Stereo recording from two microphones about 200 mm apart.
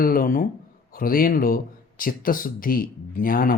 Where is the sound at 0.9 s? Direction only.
45° left (ahead or behind).